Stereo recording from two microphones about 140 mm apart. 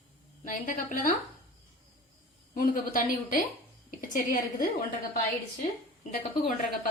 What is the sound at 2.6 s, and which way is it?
A woman's voice, 80° left.